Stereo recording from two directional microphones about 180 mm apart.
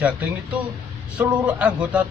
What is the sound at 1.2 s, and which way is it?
Speech, 5° right (ahead or behind).